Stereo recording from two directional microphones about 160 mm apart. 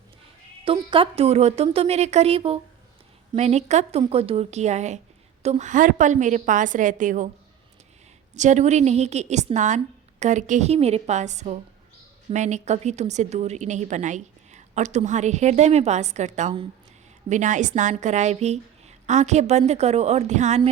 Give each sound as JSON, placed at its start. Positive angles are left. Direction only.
{"t": 0.6, "sound": "a woman's voice", "side_deg": -35}
{"t": 8.4, "sound": "a woman's voice", "side_deg": -50}